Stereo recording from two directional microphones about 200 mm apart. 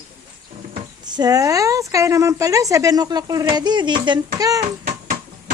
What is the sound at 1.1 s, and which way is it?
Speech, 20° right (ahead or behind).